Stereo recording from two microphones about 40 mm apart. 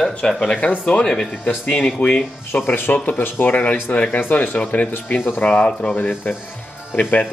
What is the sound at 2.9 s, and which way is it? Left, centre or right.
Speech, left.